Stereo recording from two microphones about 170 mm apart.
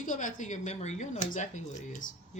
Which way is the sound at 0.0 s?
50° left (ahead or behind).